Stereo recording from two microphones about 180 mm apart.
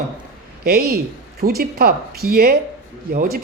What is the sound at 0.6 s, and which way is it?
A woman's voice, 60° right (ahead or behind).